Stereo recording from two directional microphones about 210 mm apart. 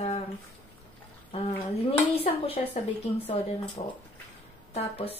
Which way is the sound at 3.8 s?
30° left (ahead or behind).